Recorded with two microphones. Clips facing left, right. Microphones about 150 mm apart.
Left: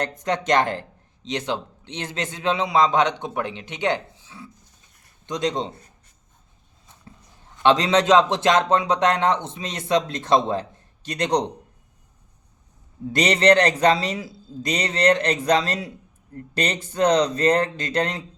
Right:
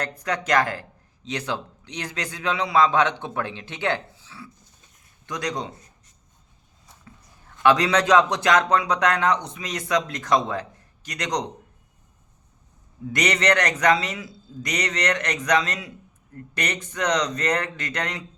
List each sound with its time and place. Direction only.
0.0 s speech: 25° left (ahead or behind)
7.6 s speech: 25° left (ahead or behind)
13.1 s speech: 30° left (ahead or behind)